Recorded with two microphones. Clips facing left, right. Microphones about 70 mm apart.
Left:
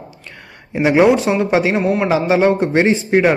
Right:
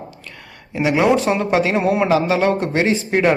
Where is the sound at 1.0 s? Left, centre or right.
Centre; by 3.0 s left.